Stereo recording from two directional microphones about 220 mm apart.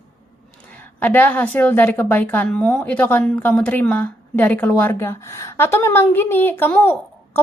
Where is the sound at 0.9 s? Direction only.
5° left (ahead or behind).